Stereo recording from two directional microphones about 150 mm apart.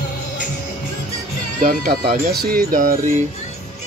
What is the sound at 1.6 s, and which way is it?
Speech, 70° right (ahead or behind).